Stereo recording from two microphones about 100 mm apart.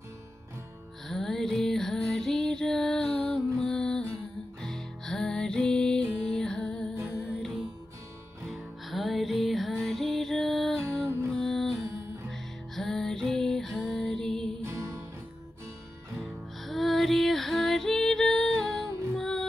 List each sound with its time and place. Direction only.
1.0 s music: 5° left (ahead or behind)
14.6 s music: 30° right (ahead or behind)
16.6 s female singing: centre (ahead or behind)
19.1 s music: centre (ahead or behind)